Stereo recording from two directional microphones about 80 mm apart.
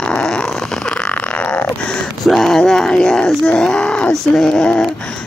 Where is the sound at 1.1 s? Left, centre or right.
Centre.